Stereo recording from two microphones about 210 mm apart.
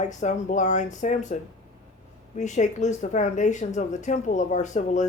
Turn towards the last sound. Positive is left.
turn(degrees=35)  # may be behind; listen again after turning